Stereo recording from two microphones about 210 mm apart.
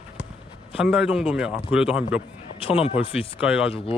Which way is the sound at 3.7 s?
25° left (ahead or behind).